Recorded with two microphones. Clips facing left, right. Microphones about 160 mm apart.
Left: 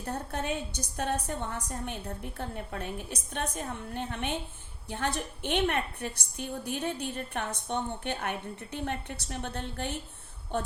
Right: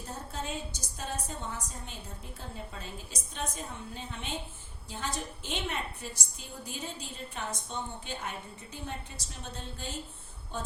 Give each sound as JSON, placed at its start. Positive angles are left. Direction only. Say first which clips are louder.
{"t": 0.0, "sound": "a woman's voice", "louder": "left 5 dB", "side_deg": 65}